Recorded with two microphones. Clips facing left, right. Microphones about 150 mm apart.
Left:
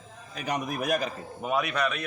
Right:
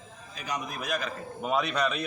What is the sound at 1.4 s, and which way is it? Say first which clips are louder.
Speech: even; 5° left (ahead or behind).